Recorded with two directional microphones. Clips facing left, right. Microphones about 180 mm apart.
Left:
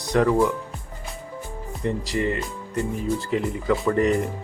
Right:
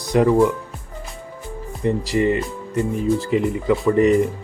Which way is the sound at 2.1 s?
10° right (ahead or behind).